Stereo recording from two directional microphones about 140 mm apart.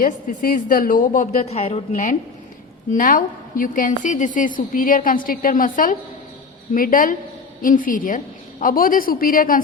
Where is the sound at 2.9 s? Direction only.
75° left (ahead or behind).